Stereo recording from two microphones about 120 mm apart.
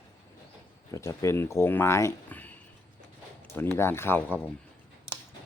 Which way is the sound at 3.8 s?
20° left (ahead or behind).